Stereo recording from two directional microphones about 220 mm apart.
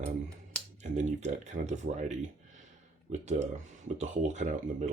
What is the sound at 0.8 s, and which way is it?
Speech, 35° right (ahead or behind).